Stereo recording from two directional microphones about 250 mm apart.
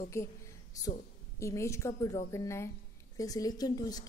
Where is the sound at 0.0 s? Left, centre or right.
Centre.